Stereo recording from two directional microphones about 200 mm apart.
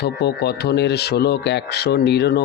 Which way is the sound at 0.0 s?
55° left (ahead or behind).